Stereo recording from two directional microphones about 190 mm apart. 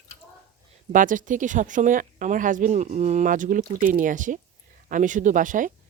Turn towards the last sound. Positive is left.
turn(degrees=-45)  # may be behind; listen again after turning